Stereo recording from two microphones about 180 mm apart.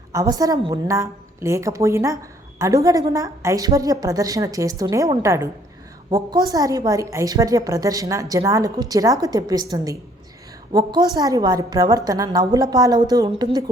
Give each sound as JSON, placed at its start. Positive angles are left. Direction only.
{"t": 0.1, "sound": "a woman's voice", "side_deg": -20}